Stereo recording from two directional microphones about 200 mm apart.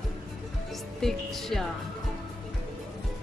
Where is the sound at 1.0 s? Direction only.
Centre (ahead or behind).